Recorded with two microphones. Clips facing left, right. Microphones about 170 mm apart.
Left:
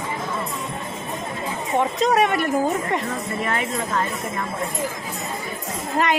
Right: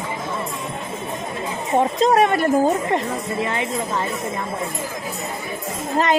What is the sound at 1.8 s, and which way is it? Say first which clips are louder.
Speech: right 3 dB; 35° right (ahead or behind).